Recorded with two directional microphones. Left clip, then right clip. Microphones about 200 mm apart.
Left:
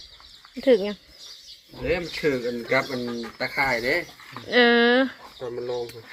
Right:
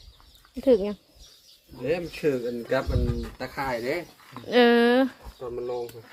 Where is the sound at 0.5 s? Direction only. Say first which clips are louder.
Left 2 dB; 10° right (ahead or behind).